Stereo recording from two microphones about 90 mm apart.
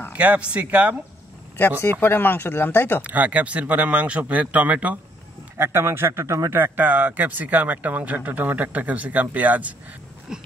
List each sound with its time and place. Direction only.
0.1 s speech: 15° right (ahead or behind)
1.8 s speech: 25° left (ahead or behind)
3.0 s speech: 15° right (ahead or behind)
5.6 s a man's voice: 25° right (ahead or behind)
6.6 s speech: 20° right (ahead or behind)